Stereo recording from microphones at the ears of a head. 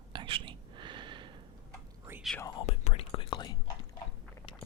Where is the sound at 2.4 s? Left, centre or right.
Left.